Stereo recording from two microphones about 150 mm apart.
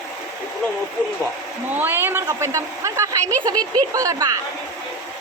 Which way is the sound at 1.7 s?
15° right (ahead or behind).